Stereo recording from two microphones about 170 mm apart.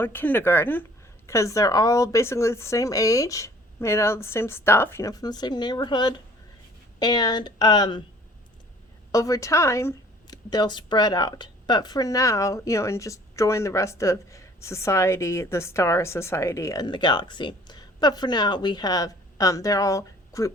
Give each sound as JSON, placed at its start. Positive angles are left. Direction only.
{"t": 0.0, "sound": "speech", "side_deg": 10}
{"t": 9.1, "sound": "speech", "side_deg": 20}